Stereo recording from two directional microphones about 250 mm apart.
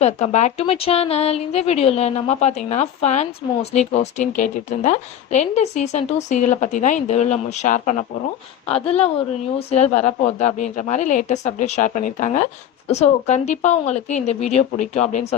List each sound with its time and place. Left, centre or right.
0.0 s a woman's voice: left